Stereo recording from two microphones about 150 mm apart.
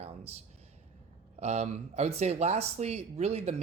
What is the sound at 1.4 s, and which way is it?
Speech, 50° right (ahead or behind).